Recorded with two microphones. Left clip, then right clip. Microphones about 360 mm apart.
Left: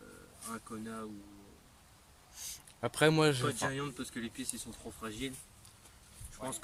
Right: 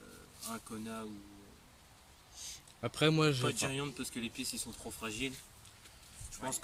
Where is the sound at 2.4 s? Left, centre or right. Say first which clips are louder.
Left 3 dB; left.